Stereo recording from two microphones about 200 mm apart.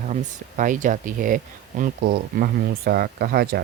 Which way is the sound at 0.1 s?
40° right (ahead or behind).